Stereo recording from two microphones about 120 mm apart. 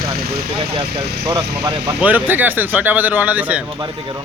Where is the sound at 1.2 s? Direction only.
35° right (ahead or behind).